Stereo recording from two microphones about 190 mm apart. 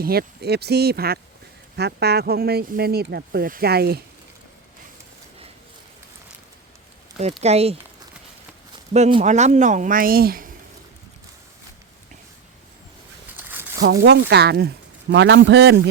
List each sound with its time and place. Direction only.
0.0 s speech: 55° right (ahead or behind)
7.4 s speech: 35° right (ahead or behind)
8.9 s speech: 30° right (ahead or behind); by 10.5 s 50° right (ahead or behind)
13.3 s a sound: 10° right (ahead or behind)
13.8 s speech: 65° right (ahead or behind)
15.1 s a man's voice: 70° right (ahead or behind)